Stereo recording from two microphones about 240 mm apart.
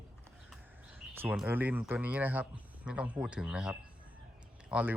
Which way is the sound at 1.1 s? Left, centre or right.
Centre.